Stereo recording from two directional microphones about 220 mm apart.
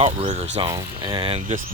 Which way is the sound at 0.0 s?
30° right (ahead or behind).